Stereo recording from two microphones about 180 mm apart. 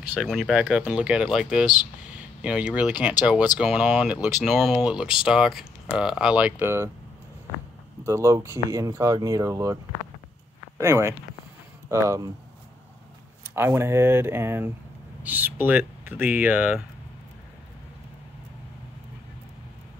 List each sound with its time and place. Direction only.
0.1 s speech: centre (ahead or behind)
8.0 s speech: 15° right (ahead or behind)
10.8 s speech: 15° right (ahead or behind)
13.4 s speech: 15° right (ahead or behind)